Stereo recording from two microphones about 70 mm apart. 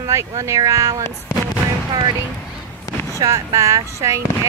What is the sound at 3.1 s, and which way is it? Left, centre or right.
Speech, right.